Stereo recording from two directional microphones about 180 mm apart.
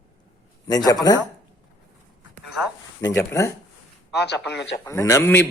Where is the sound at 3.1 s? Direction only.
15° left (ahead or behind).